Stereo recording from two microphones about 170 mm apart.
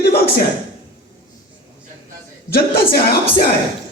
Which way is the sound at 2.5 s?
65° left (ahead or behind).